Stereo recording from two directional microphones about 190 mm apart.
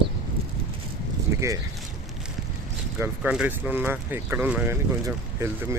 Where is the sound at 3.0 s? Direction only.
5° right (ahead or behind).